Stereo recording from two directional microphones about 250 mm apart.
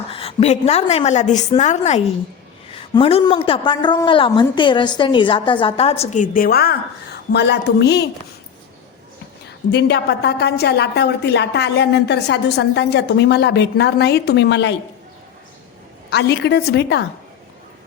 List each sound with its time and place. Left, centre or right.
0.1 s a woman's voice: left
9.7 s a woman's voice: left
16.0 s a woman's voice: left